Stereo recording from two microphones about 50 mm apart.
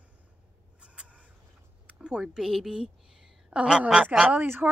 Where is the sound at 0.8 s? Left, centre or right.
Right.